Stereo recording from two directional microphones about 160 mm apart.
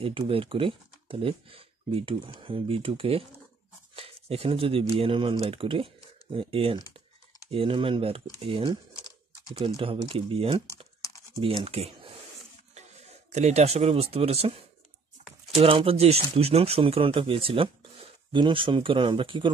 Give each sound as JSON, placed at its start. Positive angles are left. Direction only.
{"t": 0.0, "sound": "speech", "side_deg": -35}
{"t": 11.0, "sound": "crumpling", "side_deg": 20}
{"t": 11.4, "sound": "speech", "side_deg": -35}
{"t": 13.3, "sound": "speech", "side_deg": -45}
{"t": 15.5, "sound": "speech", "side_deg": -35}